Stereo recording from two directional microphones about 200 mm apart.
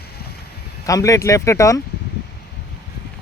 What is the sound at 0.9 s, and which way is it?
Speech, 15° left (ahead or behind).